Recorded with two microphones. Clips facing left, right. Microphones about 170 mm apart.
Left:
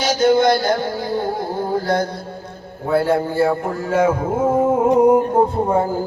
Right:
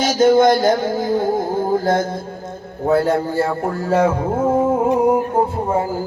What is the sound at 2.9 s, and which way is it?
A man's voice, 40° right (ahead or behind).